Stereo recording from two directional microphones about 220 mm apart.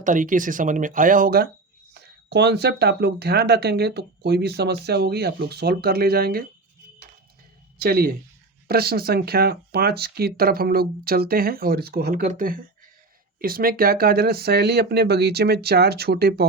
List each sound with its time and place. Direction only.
0.0 s speech: 35° right (ahead or behind)
7.8 s speech: 45° right (ahead or behind)